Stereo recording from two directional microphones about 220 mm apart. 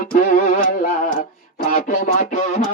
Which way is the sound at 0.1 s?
35° left (ahead or behind).